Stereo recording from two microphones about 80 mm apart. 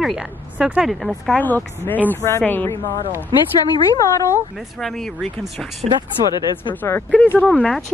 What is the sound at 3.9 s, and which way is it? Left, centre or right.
Speech, left.